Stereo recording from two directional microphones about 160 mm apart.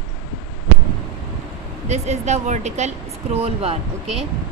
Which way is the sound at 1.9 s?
45° right (ahead or behind).